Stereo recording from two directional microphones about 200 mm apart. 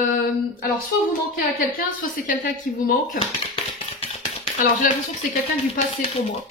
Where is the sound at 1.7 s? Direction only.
45° left (ahead or behind).